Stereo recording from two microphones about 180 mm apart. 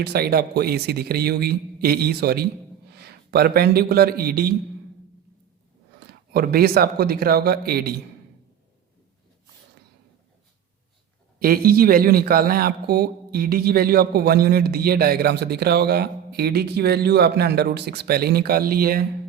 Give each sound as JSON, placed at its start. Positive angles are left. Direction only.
{"t": 0.0, "sound": "a man's voice", "side_deg": -60}
{"t": 6.3, "sound": "speech", "side_deg": -55}
{"t": 11.3, "sound": "speech", "side_deg": -55}